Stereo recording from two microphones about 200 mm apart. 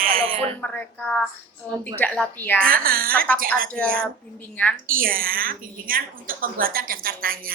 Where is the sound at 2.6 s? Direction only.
45° right (ahead or behind).